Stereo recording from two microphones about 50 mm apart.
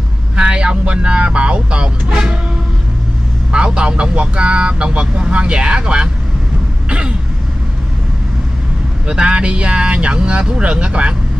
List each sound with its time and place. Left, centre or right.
0.4 s speech: right
3.5 s speech: centre
6.9 s cough: right
9.0 s speech: centre